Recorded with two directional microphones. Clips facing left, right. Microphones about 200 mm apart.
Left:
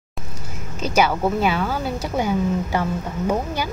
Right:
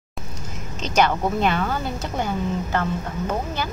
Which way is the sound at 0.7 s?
10° left (ahead or behind).